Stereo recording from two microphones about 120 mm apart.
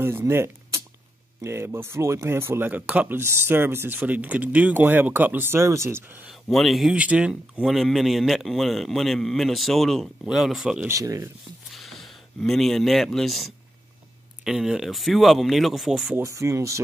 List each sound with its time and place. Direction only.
0.0 s a sound: 20° right (ahead or behind)
1.4 s speech: 20° right (ahead or behind)
6.5 s speech: centre (ahead or behind)
10.9 s speech: 25° right (ahead or behind)
11.7 s speech: centre (ahead or behind)
16.2 s speech: 25° right (ahead or behind)